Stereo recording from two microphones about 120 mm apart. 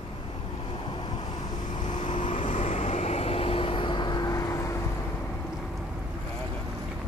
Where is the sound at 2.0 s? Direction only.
90° left; by 4.6 s 30° left (ahead or behind).